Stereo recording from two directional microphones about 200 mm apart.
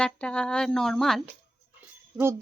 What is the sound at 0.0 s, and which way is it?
Speech, 5° left (ahead or behind).